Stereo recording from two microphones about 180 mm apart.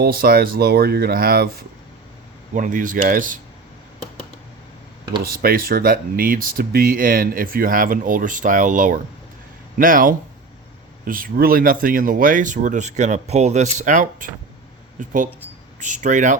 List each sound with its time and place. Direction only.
0.0 s speech: 55° right (ahead or behind)
2.5 s speech: 45° right (ahead or behind)
5.2 s speech: 55° right (ahead or behind)